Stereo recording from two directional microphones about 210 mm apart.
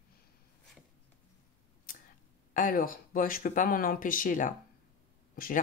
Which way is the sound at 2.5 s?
40° left (ahead or behind).